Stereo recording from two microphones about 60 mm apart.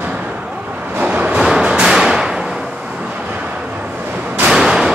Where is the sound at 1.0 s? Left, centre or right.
Right.